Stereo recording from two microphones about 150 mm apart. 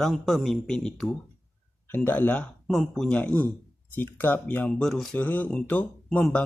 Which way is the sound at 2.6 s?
Centre (ahead or behind).